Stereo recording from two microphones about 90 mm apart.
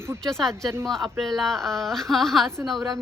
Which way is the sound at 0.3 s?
5° left (ahead or behind).